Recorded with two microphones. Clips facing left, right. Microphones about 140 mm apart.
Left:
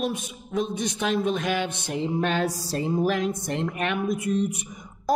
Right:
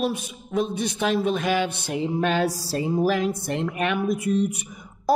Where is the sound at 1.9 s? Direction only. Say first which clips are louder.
Right 1 dB; 10° right (ahead or behind).